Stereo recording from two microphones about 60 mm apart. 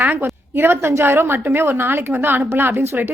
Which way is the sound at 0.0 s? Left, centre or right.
Right.